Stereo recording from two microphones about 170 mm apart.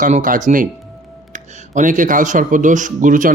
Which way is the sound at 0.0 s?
50° right (ahead or behind).